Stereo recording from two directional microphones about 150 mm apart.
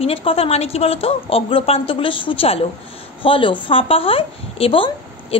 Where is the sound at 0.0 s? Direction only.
40° left (ahead or behind).